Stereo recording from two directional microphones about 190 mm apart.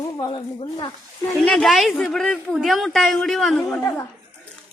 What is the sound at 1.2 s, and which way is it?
Speech, 5° left (ahead or behind).